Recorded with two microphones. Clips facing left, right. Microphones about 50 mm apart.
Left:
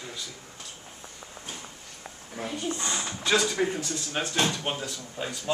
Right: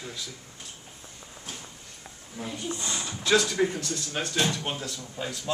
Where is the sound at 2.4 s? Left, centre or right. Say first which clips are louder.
Left 2 dB; left.